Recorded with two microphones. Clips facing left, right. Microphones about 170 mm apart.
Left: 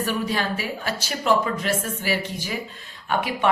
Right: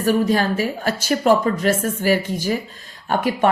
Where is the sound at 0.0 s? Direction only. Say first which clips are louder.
Right 7 dB; 40° right (ahead or behind).